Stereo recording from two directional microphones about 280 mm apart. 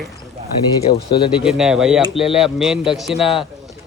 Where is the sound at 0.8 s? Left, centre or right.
Centre.